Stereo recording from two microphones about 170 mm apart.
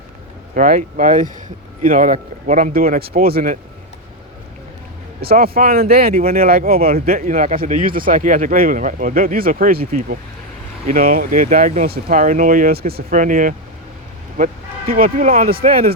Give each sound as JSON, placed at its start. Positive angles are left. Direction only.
{"t": 0.5, "sound": "speech", "side_deg": -55}
{"t": 5.2, "sound": "speech", "side_deg": -65}